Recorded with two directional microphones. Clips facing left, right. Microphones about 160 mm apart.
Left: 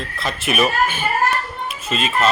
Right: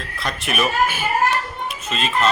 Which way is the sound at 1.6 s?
5° left (ahead or behind).